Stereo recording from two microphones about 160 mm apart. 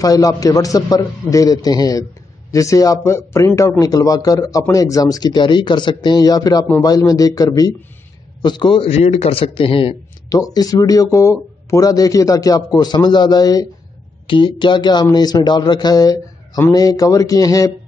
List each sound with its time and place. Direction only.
0.0 s a man's voice: 20° left (ahead or behind)
10.3 s speech: 25° left (ahead or behind)